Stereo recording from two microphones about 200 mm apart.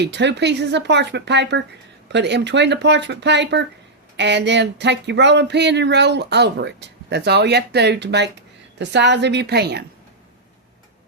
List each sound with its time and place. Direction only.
0.0 s speech: 60° right (ahead or behind)